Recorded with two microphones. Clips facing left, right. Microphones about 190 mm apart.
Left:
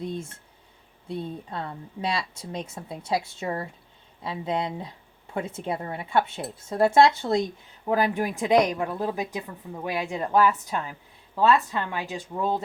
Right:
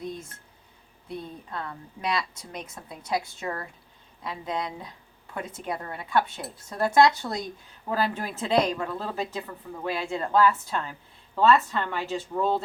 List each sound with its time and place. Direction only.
0.0 s a woman's voice: 25° left (ahead or behind)